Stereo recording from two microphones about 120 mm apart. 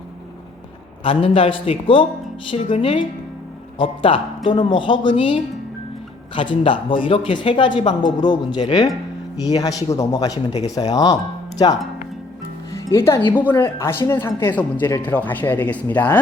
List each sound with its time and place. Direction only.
1.0 s speech: 50° left (ahead or behind)
9.4 s a woman's voice: 30° left (ahead or behind); by 16.2 s 15° left (ahead or behind)